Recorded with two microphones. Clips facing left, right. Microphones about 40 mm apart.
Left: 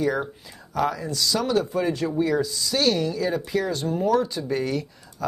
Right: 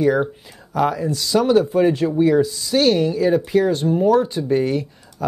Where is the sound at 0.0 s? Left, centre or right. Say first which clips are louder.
Right 7 dB; right.